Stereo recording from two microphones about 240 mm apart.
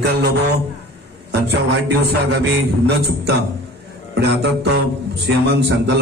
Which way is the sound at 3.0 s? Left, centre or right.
Right.